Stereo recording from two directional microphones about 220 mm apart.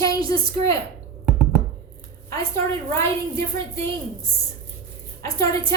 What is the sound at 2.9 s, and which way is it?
Speech, 10° left (ahead or behind).